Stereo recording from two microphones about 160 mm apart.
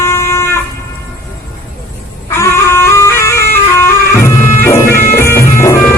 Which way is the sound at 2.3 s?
15° left (ahead or behind).